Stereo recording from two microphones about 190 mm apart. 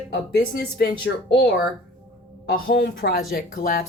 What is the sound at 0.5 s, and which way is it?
Speech, 55° left (ahead or behind).